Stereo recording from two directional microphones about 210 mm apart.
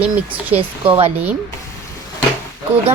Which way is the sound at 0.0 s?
5° right (ahead or behind).